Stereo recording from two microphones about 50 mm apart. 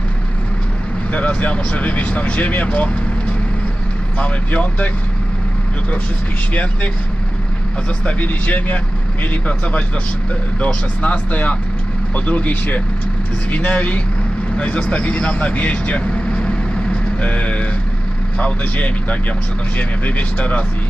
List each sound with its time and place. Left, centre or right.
1.1 s speech: left
4.2 s speech: left
6.5 s speech: left
8.0 s speech: left
11.0 s speech: left
14.5 s vehicle: left
18.3 s speech: left